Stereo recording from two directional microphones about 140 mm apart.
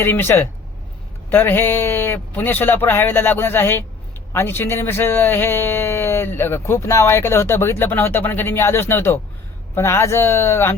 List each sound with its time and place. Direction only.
0.0 s speech: 15° left (ahead or behind)